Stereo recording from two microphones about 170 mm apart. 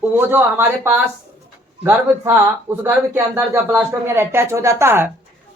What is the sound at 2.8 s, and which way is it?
Speech, 15° right (ahead or behind).